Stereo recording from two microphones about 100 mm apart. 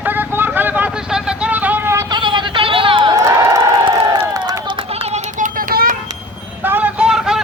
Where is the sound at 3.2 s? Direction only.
35° right (ahead or behind).